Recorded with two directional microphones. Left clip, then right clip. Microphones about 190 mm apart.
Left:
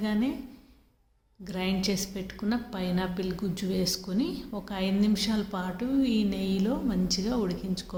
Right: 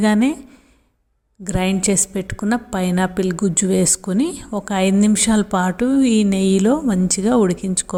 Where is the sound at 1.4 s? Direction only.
45° right (ahead or behind).